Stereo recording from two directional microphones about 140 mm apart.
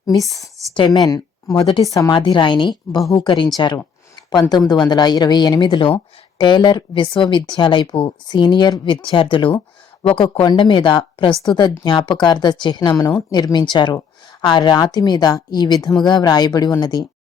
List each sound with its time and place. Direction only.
0.0 s speech: 25° left (ahead or behind)
1.5 s speech: 40° left (ahead or behind)
1.8 s speech: 25° left (ahead or behind)
2.1 s speech: 35° left (ahead or behind)
4.1 s a sound: 30° left (ahead or behind)
4.7 s speech: 30° left (ahead or behind)